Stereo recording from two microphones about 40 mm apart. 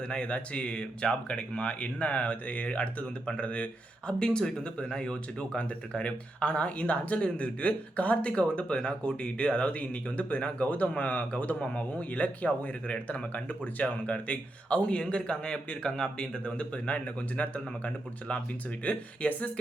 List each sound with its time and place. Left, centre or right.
0.1 s speech: left